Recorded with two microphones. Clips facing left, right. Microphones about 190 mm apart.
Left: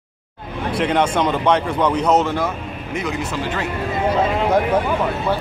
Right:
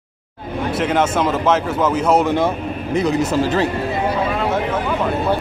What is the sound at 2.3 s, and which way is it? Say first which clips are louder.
Speech: right 5 dB; 30° right (ahead or behind).